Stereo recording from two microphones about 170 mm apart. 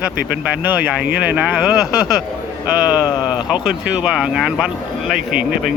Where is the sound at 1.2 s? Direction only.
5° right (ahead or behind).